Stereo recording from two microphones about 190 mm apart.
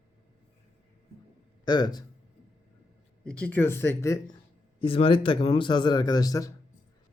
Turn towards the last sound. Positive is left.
turn(degrees=20)  # may be behind; listen again after turning